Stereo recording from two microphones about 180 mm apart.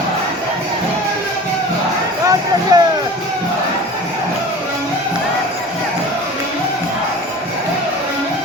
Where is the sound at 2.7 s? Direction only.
20° right (ahead or behind).